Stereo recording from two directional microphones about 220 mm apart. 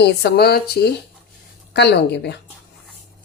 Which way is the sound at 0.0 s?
50° left (ahead or behind).